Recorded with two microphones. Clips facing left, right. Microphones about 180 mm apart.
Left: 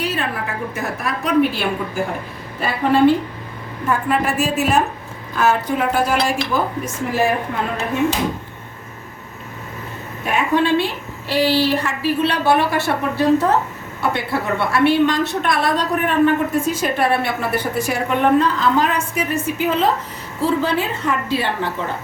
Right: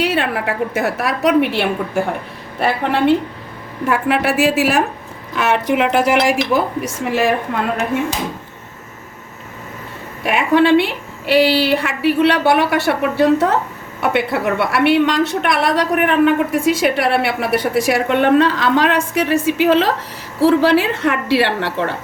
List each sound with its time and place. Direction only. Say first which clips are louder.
0.0 s a woman's voice: right 5 dB; 70° right (ahead or behind)
10.2 s a woman's voice: right 4 dB; 80° right